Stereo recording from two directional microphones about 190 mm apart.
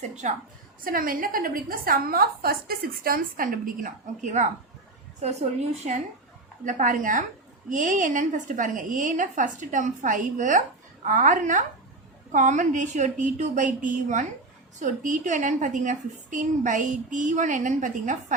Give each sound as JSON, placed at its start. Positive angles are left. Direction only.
{"t": 0.0, "sound": "a woman's voice", "side_deg": -40}